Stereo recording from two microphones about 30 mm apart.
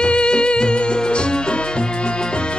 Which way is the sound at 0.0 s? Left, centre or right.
Left.